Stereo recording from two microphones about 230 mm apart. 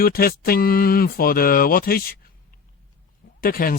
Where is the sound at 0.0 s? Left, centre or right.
Left.